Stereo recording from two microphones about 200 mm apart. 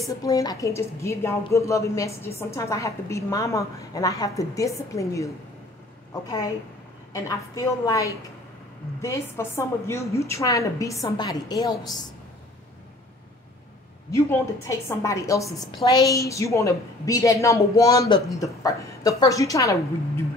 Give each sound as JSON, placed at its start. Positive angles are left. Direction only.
{"t": 0.0, "sound": "a woman's voice", "side_deg": 15}
{"t": 7.1, "sound": "a woman's voice", "side_deg": 15}
{"t": 14.1, "sound": "a woman's voice", "side_deg": 15}